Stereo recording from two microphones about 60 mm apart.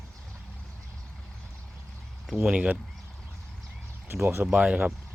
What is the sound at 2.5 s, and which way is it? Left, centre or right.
Speech, right.